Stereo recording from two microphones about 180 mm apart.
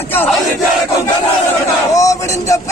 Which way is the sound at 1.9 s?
20° left (ahead or behind).